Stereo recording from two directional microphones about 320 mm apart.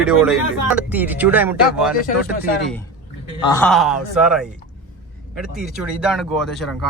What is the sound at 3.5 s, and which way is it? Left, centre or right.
Speech, centre.